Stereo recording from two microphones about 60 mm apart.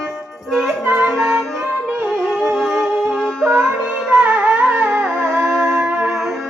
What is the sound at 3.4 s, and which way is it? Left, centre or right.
Music, right.